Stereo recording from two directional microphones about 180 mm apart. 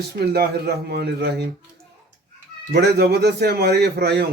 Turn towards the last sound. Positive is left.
turn(degrees=-65)  # may be behind; listen again after turning